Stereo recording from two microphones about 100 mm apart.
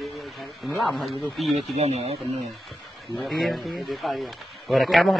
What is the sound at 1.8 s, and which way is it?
Speech, 90° right.